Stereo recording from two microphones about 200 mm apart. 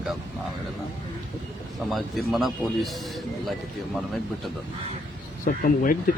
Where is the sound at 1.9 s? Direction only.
Centre (ahead or behind).